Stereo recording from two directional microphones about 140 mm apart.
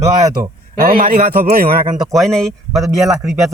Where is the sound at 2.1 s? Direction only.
5° left (ahead or behind).